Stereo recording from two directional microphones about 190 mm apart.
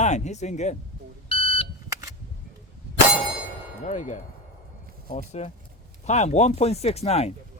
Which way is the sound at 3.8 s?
40° left (ahead or behind).